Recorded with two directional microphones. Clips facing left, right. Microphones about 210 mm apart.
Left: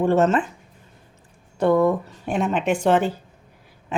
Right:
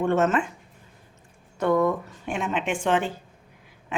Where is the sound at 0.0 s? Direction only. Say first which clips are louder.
Left 4 dB; 35° left (ahead or behind).